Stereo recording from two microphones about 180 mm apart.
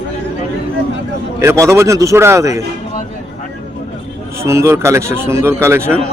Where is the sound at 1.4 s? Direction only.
15° right (ahead or behind).